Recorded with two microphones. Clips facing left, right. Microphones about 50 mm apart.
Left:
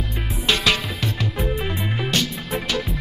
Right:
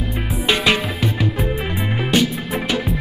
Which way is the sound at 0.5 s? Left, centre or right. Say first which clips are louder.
Right 3 dB; centre.